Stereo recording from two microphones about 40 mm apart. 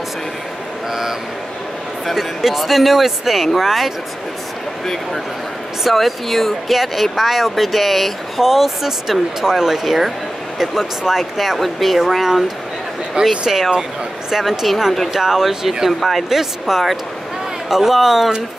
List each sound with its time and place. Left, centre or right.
2.0 s speech: centre
5.9 s speech: centre
13.2 s speech: right
14.3 s speech: centre
16.3 s speech: centre